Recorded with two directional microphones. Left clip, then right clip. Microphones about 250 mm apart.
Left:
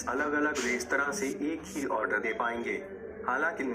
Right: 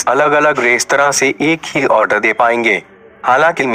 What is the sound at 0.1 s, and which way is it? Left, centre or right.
A man's voice, right.